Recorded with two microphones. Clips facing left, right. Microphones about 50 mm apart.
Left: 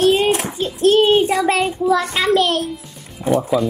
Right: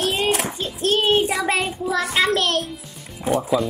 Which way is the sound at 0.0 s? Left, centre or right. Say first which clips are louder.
Left 6 dB; centre.